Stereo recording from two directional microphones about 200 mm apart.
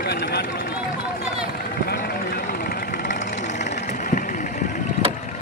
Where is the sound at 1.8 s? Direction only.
50° left (ahead or behind).